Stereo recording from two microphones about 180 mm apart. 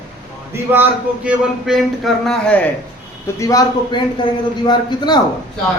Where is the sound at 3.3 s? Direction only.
20° left (ahead or behind).